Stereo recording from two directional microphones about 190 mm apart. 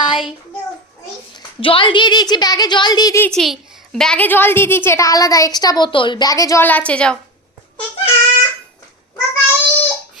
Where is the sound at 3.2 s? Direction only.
Centre (ahead or behind).